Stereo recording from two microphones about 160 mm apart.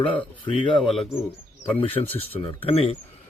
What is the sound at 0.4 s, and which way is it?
Speech, 30° left (ahead or behind).